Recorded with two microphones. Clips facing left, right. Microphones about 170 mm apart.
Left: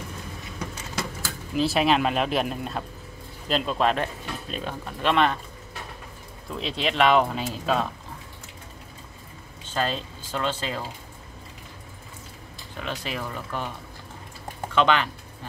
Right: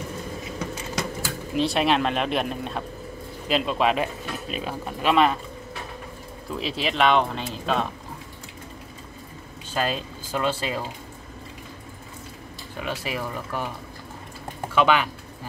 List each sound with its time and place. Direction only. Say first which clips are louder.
1.5 s speech: even; centre (ahead or behind)
6.6 s speech: even; 5° right (ahead or behind)
9.8 s speech: right 1 dB; 10° right (ahead or behind)
12.7 s speech: right 2 dB; 10° right (ahead or behind)
14.7 s speech: right 1 dB; 10° right (ahead or behind)